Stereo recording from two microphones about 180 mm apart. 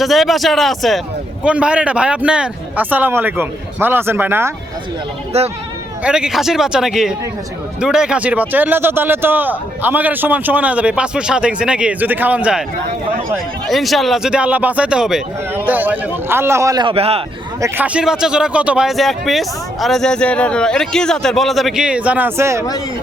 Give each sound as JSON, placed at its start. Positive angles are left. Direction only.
{"t": 0.0, "sound": "a man's voice", "side_deg": 0}
{"t": 5.3, "sound": "speech", "side_deg": -35}
{"t": 6.0, "sound": "a man's voice", "side_deg": -5}
{"t": 13.7, "sound": "a man's voice", "side_deg": 0}
{"t": 17.6, "sound": "a man's voice", "side_deg": -10}